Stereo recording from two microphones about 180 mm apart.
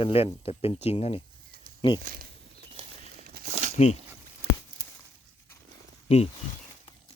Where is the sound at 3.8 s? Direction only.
40° left (ahead or behind).